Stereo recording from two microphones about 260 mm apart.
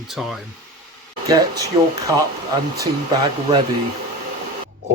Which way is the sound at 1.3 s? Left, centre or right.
Centre.